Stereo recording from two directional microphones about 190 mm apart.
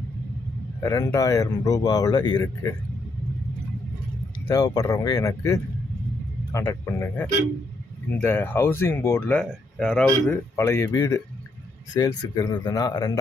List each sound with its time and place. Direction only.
0.8 s speech: 15° left (ahead or behind)
4.5 s speech: 20° left (ahead or behind)